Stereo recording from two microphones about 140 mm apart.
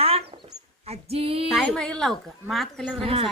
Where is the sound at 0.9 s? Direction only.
45° right (ahead or behind).